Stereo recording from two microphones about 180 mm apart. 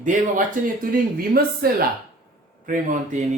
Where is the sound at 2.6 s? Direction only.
45° right (ahead or behind).